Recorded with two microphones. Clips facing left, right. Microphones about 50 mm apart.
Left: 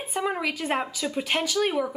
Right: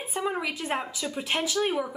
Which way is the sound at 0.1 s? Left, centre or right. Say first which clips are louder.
Left 2 dB; centre.